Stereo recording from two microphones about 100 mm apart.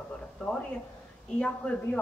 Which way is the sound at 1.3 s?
10° left (ahead or behind).